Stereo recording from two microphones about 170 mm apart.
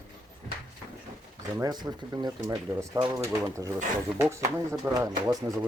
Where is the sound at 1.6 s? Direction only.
25° right (ahead or behind).